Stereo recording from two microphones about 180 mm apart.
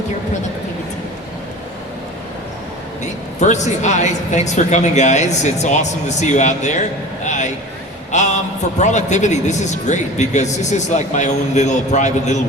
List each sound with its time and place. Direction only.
3.4 s speech: 40° left (ahead or behind)
7.3 s vehicle: 40° left (ahead or behind)
8.1 s speech: 40° left (ahead or behind)